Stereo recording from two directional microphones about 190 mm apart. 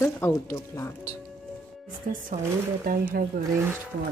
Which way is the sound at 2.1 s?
45° right (ahead or behind).